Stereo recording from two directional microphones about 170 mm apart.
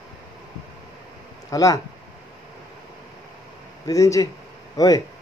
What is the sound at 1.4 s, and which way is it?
Speech, 20° left (ahead or behind).